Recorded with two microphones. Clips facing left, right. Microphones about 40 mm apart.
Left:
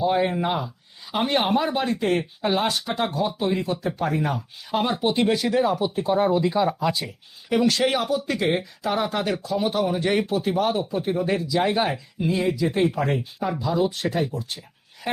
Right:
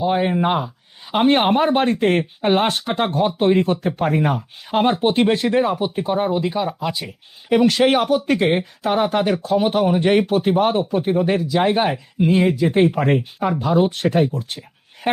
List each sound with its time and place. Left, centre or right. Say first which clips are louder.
0.0 s speech: right 3 dB; right
7.8 s a woman's voice: right 6 dB; right